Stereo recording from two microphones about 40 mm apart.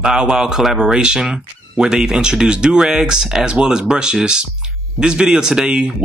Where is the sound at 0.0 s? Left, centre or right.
Centre.